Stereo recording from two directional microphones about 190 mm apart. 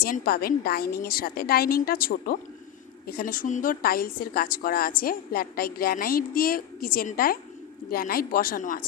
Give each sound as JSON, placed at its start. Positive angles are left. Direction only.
{"t": 0.0, "sound": "a woman's voice", "side_deg": 50}